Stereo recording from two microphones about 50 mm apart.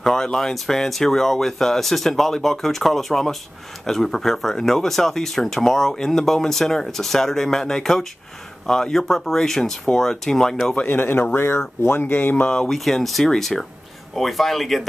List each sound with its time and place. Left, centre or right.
0.0 s speech: centre
10.9 s speech: left
11.3 s speech: left
12.6 s speech: centre